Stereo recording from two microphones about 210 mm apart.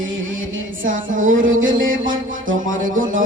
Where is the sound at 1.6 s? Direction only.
65° right (ahead or behind).